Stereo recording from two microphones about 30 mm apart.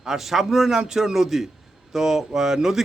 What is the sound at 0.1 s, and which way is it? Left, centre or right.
A man's voice, centre.